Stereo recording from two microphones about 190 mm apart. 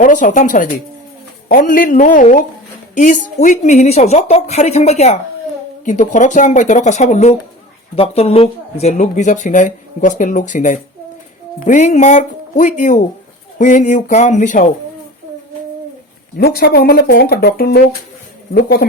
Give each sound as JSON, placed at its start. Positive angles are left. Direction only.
{"t": 0.0, "sound": "a woman's voice", "side_deg": 45}
{"t": 16.4, "sound": "speech", "side_deg": 55}